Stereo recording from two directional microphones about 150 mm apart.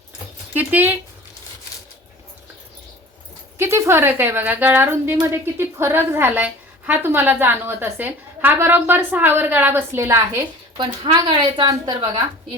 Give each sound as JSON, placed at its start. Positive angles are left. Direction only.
{"t": 0.5, "sound": "speech", "side_deg": -10}
{"t": 3.6, "sound": "a woman's voice", "side_deg": -15}
{"t": 10.8, "sound": "a woman's voice", "side_deg": -30}